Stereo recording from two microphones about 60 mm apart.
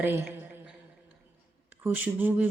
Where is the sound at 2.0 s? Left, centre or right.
Right.